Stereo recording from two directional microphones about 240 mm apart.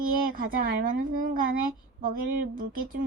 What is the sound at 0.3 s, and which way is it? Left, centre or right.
A woman's voice, right.